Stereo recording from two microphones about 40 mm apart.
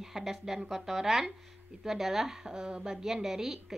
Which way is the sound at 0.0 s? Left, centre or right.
Centre.